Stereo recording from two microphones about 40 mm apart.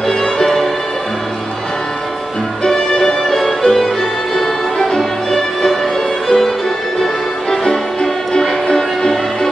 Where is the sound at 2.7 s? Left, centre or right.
Centre.